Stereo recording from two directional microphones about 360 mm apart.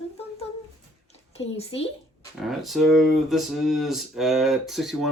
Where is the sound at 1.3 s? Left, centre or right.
Centre.